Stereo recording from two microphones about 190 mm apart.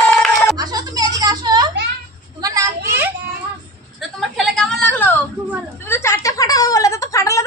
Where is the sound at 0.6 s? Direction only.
20° right (ahead or behind).